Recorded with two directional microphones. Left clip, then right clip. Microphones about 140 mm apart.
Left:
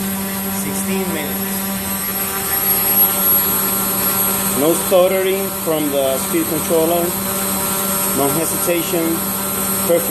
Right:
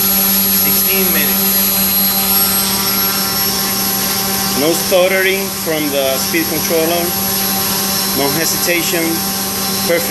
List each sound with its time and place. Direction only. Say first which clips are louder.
4.6 s speech: even; 15° left (ahead or behind)